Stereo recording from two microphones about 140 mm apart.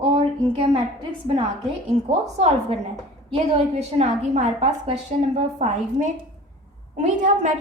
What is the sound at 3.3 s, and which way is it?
A woman's voice, 50° right (ahead or behind).